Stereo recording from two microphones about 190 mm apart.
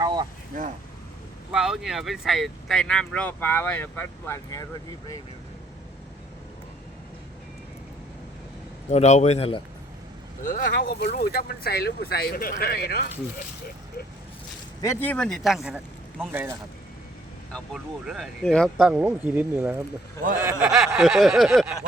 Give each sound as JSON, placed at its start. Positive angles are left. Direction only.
{"t": 0.0, "sound": "a sound", "side_deg": -20}
{"t": 0.5, "sound": "speech", "side_deg": -45}
{"t": 1.5, "sound": "speech", "side_deg": -5}
{"t": 8.9, "sound": "a man's voice", "side_deg": 35}
{"t": 10.4, "sound": "speech", "side_deg": 45}
{"t": 14.8, "sound": "speech", "side_deg": 15}
{"t": 18.0, "sound": "speech", "side_deg": 0}